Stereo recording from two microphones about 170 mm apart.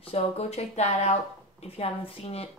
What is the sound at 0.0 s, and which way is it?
Speech, 35° left (ahead or behind).